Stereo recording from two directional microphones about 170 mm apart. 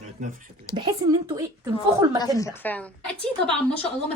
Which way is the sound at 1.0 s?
25° right (ahead or behind).